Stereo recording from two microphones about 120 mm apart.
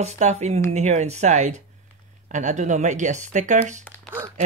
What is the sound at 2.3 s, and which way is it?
Speech, 90° right.